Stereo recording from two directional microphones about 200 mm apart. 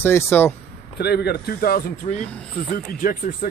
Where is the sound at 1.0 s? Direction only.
55° left (ahead or behind).